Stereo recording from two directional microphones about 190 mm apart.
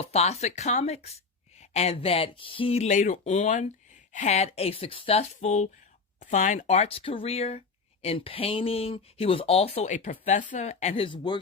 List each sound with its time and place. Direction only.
0.0 s speech: 35° left (ahead or behind)